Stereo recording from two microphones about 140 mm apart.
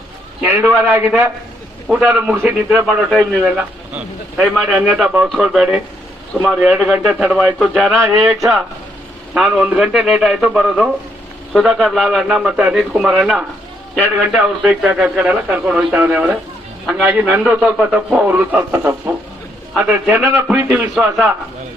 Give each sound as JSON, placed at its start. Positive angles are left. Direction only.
{"t": 0.4, "sound": "a man's voice", "side_deg": -15}
{"t": 4.4, "sound": "a man's voice", "side_deg": 0}